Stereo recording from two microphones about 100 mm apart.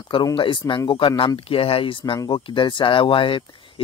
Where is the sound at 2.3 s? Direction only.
55° left (ahead or behind).